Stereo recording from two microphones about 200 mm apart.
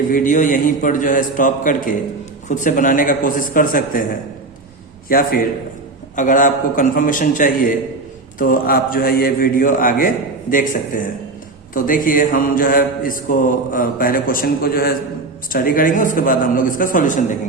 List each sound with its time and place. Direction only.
0.1 s a man's voice: 40° left (ahead or behind)
2.5 s mantra: 40° left (ahead or behind)
5.0 s mantra: 45° left (ahead or behind)
6.1 s a man's voice: 40° left (ahead or behind)
8.4 s mantra: 45° left (ahead or behind)